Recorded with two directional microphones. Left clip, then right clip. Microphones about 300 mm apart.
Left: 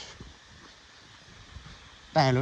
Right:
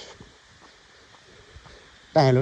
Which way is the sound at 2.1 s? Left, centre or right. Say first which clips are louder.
Right 5 dB; centre.